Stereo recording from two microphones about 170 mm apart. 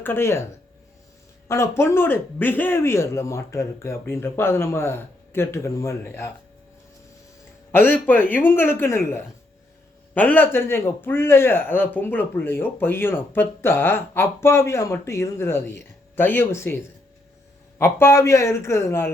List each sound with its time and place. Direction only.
0.0 s a man's voice: 15° left (ahead or behind)
1.5 s a man's voice: 15° left (ahead or behind)
7.7 s a man's voice: 10° left (ahead or behind)
17.7 s a man's voice: 15° left (ahead or behind)